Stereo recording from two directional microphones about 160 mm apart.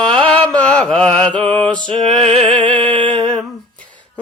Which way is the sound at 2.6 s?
10° left (ahead or behind).